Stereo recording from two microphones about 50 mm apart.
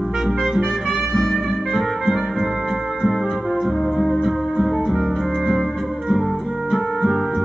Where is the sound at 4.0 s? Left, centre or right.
Centre.